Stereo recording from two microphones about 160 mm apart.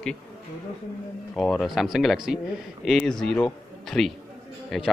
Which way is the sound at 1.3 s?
Centre (ahead or behind).